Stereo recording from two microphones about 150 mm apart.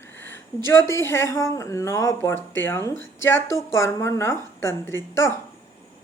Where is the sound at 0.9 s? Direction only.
15° left (ahead or behind).